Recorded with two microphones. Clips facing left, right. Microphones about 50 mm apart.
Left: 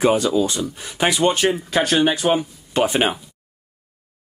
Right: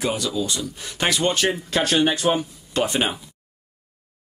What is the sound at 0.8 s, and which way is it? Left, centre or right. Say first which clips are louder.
Speech: left 4 dB; centre.